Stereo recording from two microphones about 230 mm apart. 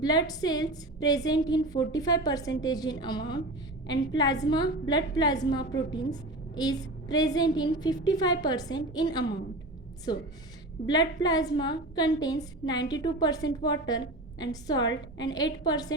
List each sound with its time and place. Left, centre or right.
0.0 s a woman's voice: centre
11.2 s a woman's voice: centre